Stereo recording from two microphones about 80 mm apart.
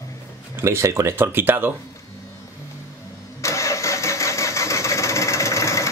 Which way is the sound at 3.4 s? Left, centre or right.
Left.